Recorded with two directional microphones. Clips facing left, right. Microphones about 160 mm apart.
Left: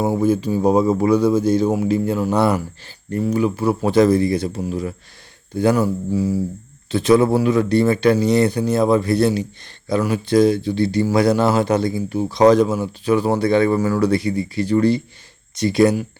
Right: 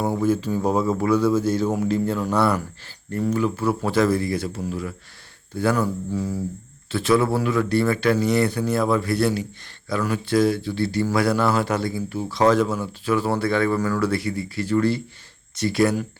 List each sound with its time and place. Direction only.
0.0 s speech: 15° left (ahead or behind)